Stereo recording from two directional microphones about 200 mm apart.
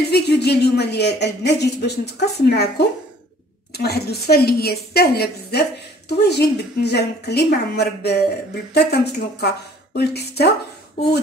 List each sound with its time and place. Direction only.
0.1 s speech: 55° left (ahead or behind)
3.7 s a woman's voice: 55° left (ahead or behind)